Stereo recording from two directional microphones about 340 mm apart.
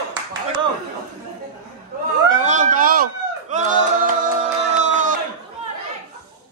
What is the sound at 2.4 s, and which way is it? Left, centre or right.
Speech, right.